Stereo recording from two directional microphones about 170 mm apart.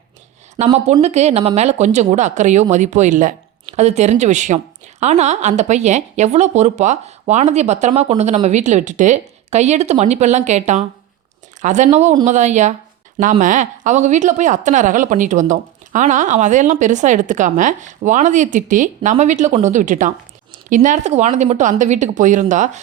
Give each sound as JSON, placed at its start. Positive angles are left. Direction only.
{"t": 0.6, "sound": "a woman's voice", "side_deg": -40}